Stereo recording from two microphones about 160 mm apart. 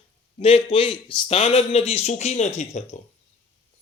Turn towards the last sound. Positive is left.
turn(degrees=45)  # may be behind; listen again after turning